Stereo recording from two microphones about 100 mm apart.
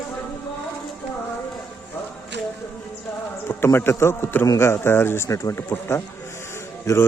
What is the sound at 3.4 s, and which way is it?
A man's voice, 25° left (ahead or behind).